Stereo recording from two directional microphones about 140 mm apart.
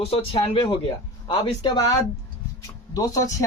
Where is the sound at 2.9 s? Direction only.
25° left (ahead or behind).